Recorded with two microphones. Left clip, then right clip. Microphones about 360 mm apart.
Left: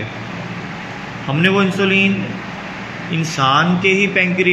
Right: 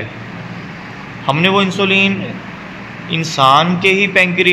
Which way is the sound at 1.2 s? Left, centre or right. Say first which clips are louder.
Right 3 dB; centre.